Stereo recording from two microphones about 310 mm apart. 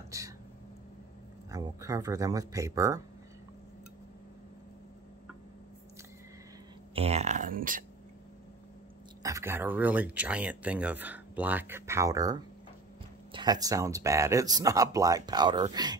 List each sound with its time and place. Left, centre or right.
1.5 s speech: centre
7.0 s speech: right
9.2 s speech: centre